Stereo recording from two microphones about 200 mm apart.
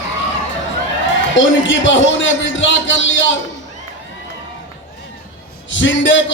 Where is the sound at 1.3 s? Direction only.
70° left (ahead or behind).